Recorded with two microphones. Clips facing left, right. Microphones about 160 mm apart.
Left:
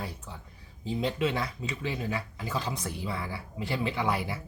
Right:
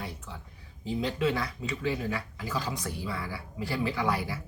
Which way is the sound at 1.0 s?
25° left (ahead or behind).